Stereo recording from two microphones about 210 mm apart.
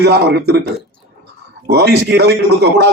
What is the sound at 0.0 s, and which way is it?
Speech, 50° right (ahead or behind).